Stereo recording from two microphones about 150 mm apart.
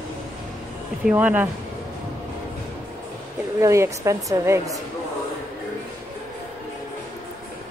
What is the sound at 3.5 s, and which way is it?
A woman's voice, 20° right (ahead or behind).